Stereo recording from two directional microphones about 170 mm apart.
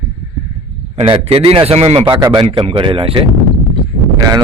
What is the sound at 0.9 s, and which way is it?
A man's voice, 35° right (ahead or behind).